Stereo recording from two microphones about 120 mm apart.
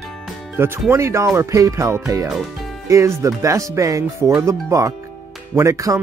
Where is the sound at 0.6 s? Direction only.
20° right (ahead or behind).